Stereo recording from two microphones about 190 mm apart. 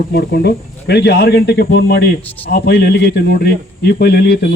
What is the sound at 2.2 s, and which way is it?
Speech, 10° left (ahead or behind).